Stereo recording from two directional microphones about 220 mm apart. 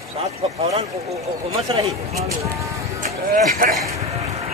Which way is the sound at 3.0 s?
40° right (ahead or behind).